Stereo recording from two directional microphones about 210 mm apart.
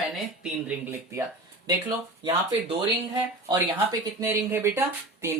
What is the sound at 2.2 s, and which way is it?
Speech, 25° right (ahead or behind).